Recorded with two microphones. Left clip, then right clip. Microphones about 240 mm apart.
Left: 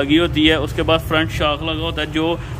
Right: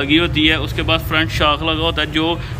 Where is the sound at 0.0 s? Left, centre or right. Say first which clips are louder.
Even; centre.